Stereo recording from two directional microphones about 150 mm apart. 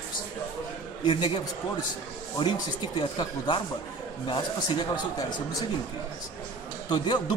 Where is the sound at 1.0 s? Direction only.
35° left (ahead or behind).